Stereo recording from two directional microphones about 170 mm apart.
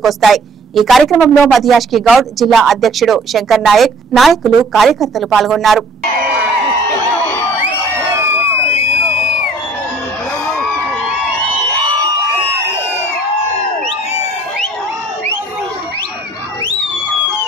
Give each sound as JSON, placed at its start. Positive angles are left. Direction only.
{"t": 0.0, "sound": "speech", "side_deg": 0}